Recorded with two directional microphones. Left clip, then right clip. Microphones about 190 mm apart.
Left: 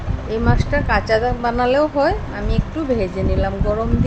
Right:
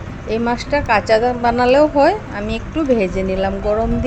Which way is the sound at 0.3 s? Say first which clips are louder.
Right 2 dB; 15° right (ahead or behind).